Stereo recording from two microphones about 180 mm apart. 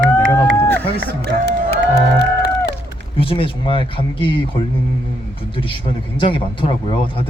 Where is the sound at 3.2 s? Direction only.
30° left (ahead or behind).